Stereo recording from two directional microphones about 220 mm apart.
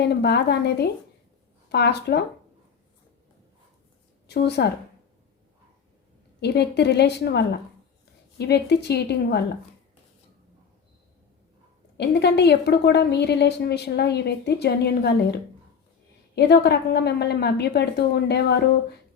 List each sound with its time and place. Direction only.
0.0 s a woman's voice: 50° left (ahead or behind)
4.3 s a woman's voice: 50° left (ahead or behind)
6.4 s a woman's voice: 50° left (ahead or behind)
11.9 s a woman's voice: 50° left (ahead or behind)